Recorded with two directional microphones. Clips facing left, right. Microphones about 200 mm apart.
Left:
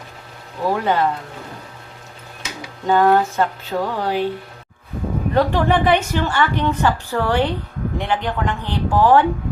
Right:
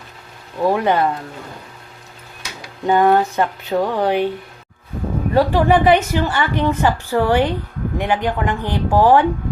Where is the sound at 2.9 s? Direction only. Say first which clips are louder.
Right 1 dB; 15° right (ahead or behind).